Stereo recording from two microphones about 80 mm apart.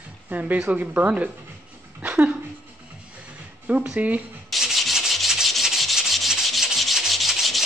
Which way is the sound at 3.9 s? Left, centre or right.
Centre.